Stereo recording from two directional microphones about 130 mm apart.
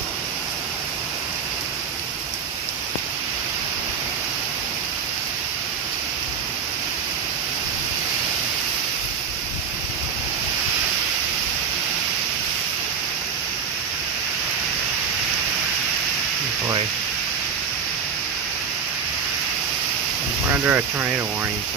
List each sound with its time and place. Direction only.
20.6 s speech: 15° right (ahead or behind)